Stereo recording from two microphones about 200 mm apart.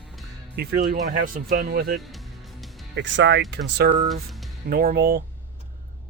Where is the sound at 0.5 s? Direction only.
50° right (ahead or behind).